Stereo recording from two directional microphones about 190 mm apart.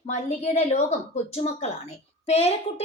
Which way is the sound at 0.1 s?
35° left (ahead or behind).